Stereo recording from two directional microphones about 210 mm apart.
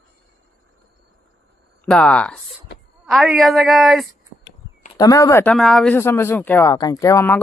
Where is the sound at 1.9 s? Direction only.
5° left (ahead or behind).